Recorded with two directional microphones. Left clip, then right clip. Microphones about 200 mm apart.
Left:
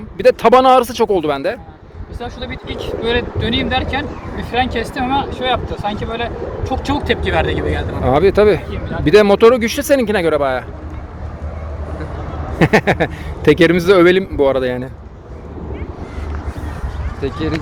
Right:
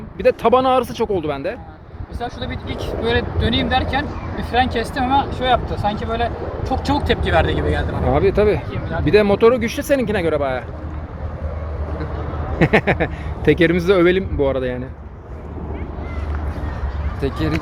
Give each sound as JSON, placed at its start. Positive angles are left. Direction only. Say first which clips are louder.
{"t": 0.2, "sound": "speech", "louder": "left 5 dB", "side_deg": 40}
{"t": 2.2, "sound": "speech", "louder": "left 1 dB", "side_deg": 0}
{"t": 8.0, "sound": "speech", "louder": "left 5 dB", "side_deg": 40}
{"t": 12.5, "sound": "speech", "louder": "left 3 dB", "side_deg": 30}
{"t": 17.2, "sound": "speech", "louder": "left 2 dB", "side_deg": -50}